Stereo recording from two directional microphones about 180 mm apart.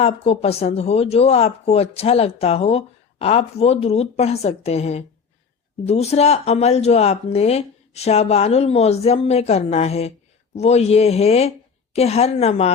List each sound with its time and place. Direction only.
0.0 s speech: 35° left (ahead or behind)